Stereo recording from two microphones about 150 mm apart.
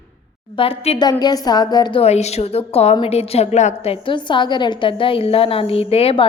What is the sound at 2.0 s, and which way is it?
A woman's voice, 45° left (ahead or behind).